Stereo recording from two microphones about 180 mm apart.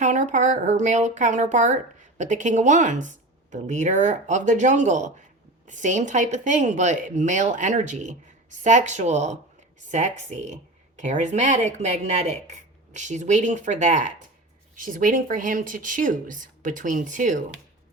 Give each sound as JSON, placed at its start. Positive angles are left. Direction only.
{"t": 0.0, "sound": "speech", "side_deg": -40}